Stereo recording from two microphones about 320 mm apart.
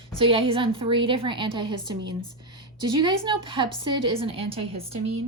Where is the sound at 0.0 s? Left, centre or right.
Centre.